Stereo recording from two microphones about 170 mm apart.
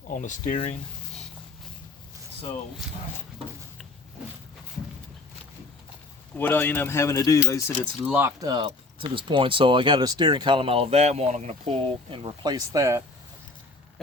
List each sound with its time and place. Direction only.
0.1 s speech: 50° left (ahead or behind)
6.3 s speech: 10° left (ahead or behind)
8.0 s speech: 10° right (ahead or behind)
8.4 s speech: 25° right (ahead or behind)